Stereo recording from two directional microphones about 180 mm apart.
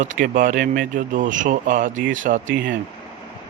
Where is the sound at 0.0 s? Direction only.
45° right (ahead or behind).